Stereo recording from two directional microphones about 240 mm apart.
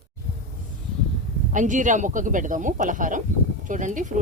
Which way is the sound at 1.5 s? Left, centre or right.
Right.